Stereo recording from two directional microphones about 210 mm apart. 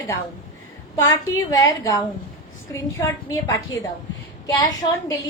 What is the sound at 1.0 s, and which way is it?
A woman's voice, 15° left (ahead or behind).